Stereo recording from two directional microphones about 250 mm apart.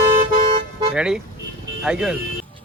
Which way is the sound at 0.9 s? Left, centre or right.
Centre.